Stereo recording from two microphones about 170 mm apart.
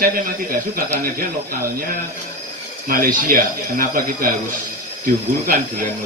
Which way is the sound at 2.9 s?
55° right (ahead or behind).